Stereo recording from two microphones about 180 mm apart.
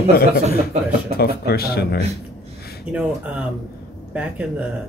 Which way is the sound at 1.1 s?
60° left (ahead or behind).